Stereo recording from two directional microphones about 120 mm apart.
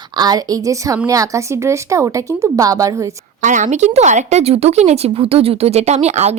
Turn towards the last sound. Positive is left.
turn(degrees=-65)  # may be behind; listen again after turning